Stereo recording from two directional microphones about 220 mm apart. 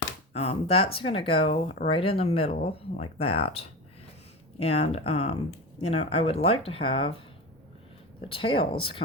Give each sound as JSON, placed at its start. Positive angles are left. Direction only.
{"t": 0.3, "sound": "speech", "side_deg": 25}
{"t": 8.2, "sound": "speech", "side_deg": 25}